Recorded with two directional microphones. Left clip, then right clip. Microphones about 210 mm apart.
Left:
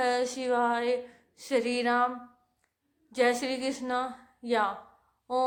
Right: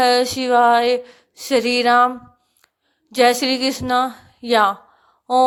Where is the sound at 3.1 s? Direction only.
45° right (ahead or behind).